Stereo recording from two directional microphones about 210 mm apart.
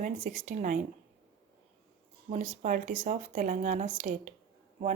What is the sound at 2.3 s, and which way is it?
A woman's voice, 35° right (ahead or behind).